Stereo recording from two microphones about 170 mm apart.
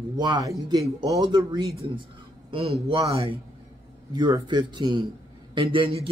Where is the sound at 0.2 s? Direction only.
25° right (ahead or behind).